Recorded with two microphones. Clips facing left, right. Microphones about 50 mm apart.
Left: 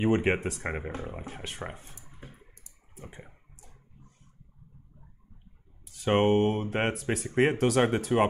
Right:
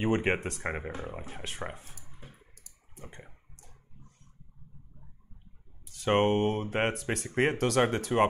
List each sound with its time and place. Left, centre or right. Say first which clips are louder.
0.0 s speech: left 2 dB; centre
2.9 s a sound: left 2 dB; centre
5.9 s speech: left 2 dB; centre